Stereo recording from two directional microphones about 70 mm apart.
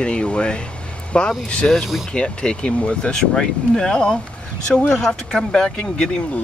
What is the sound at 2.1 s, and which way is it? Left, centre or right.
Speech, centre.